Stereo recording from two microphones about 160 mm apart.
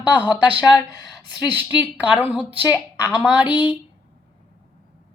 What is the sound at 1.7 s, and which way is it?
Speech, 10° right (ahead or behind).